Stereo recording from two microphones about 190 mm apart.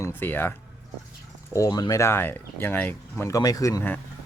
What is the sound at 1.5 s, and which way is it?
Speech, 20° left (ahead or behind).